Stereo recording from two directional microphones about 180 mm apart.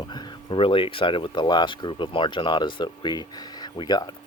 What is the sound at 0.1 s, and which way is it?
Speech, 25° left (ahead or behind).